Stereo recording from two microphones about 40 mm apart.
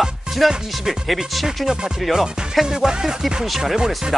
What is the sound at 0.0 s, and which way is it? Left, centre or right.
Music, centre.